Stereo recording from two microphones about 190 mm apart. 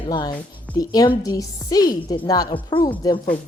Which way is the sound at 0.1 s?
20° left (ahead or behind).